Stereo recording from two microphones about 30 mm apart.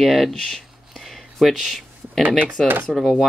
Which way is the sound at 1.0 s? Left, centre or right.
Centre.